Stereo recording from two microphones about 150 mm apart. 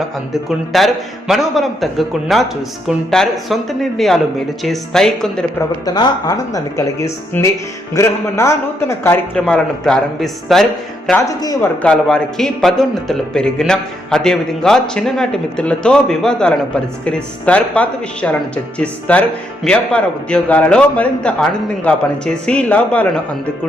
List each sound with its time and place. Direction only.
0.4 s a man's voice: centre (ahead or behind)
5.5 s speech: 25° left (ahead or behind)
9.5 s a man's voice: 5° left (ahead or behind)
11.3 s speech: 25° left (ahead or behind)
11.8 s a man's voice: 5° left (ahead or behind)
22.4 s a man's voice: 5° left (ahead or behind)